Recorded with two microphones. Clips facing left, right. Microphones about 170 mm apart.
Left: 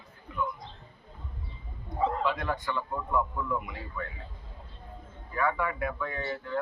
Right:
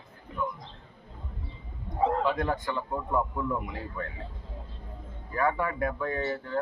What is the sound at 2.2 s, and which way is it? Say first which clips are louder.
A man's voice: right 2 dB; 45° right (ahead or behind).